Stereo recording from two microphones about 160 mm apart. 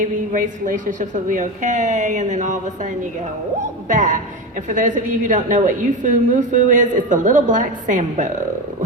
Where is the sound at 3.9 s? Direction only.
55° right (ahead or behind).